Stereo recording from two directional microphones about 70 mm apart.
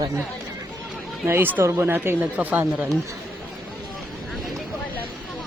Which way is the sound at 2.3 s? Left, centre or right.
Right.